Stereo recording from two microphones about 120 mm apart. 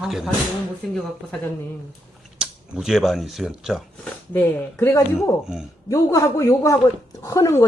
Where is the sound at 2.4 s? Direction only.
5° right (ahead or behind).